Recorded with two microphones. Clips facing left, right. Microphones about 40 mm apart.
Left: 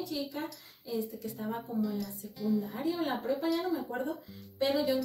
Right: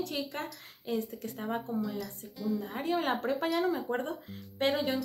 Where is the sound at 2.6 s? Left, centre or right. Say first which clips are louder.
Right 2 dB; right.